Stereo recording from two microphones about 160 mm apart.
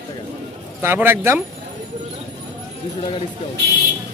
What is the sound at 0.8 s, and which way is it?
Speech, 15° right (ahead or behind).